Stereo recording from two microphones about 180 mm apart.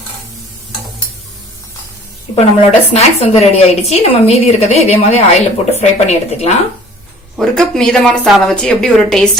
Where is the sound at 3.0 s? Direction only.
35° left (ahead or behind).